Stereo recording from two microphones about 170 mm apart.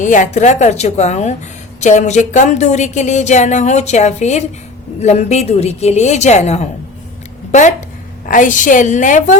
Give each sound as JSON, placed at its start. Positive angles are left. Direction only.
{"t": 0.0, "sound": "a woman's voice", "side_deg": 45}